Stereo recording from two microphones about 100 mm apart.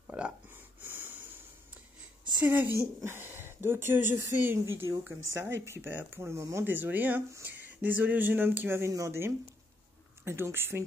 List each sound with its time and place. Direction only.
0.1 s speech: 10° right (ahead or behind)
0.7 s wheeze: 20° right (ahead or behind)
2.4 s a woman's voice: 20° right (ahead or behind)